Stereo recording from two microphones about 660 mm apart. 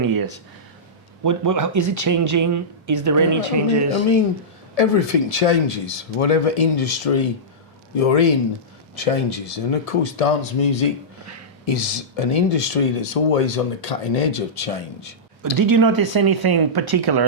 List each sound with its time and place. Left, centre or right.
0.0 s a sound: right
1.2 s speech: right
4.7 s speech: left
11.6 s speech: left
15.5 s speech: right